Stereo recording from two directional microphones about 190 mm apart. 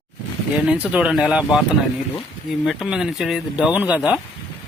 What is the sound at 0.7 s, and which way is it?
Speech, 5° right (ahead or behind).